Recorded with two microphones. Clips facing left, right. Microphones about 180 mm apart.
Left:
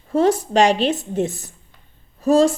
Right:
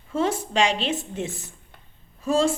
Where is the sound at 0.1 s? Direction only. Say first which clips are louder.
Left 7 dB; 40° left (ahead or behind).